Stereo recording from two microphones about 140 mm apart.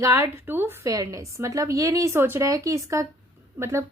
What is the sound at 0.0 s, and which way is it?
A woman's voice, 20° right (ahead or behind).